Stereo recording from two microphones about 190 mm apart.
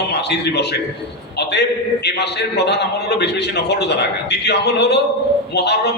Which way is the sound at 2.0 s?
60° left (ahead or behind).